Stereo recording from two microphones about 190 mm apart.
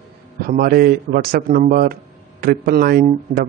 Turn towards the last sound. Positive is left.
turn(degrees=-50)  # may be behind; listen again after turning